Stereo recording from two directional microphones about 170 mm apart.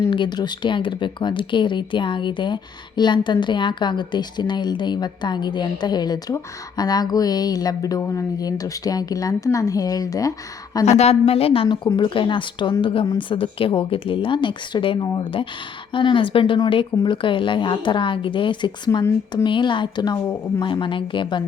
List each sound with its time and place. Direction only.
0.1 s a woman's voice: 25° left (ahead or behind)
10.8 s a woman's voice: 40° left (ahead or behind)